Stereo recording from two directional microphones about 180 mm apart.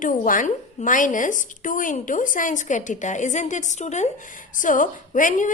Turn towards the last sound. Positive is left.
turn(degrees=45)  # may be behind; listen again after turning